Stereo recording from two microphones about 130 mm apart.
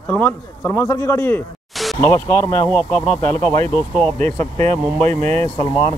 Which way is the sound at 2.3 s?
20° left (ahead or behind).